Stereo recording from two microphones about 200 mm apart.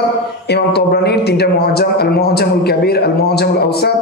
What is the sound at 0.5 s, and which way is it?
A man's voice, 55° left (ahead or behind).